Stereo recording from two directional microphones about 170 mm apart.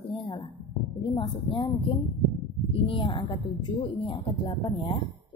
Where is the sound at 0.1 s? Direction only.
30° left (ahead or behind).